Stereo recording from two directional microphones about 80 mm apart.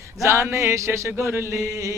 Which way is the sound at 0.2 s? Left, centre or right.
Right.